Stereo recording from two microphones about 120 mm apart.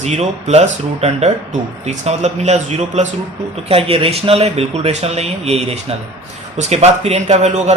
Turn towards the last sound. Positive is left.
turn(degrees=-65)  # may be behind; listen again after turning